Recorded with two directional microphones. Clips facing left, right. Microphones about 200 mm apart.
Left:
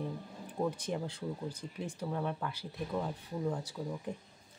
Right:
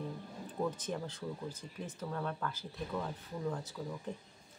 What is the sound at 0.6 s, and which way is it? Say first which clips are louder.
Speech: left 2 dB; 10° left (ahead or behind).